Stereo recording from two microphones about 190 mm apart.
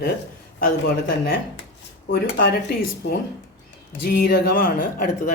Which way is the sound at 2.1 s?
70° left (ahead or behind).